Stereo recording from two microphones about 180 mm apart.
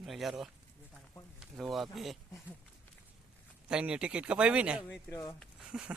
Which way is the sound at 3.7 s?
5° right (ahead or behind).